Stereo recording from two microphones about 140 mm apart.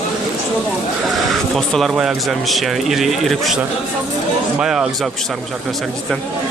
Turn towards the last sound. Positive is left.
turn(degrees=-5)  # may be behind; listen again after turning